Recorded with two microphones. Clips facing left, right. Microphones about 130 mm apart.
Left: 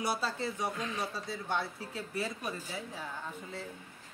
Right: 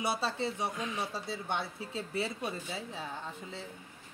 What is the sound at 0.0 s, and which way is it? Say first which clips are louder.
Speech: right 1 dB; 25° right (ahead or behind).